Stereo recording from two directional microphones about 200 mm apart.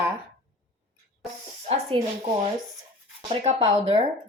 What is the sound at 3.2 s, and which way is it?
Speech, 30° right (ahead or behind).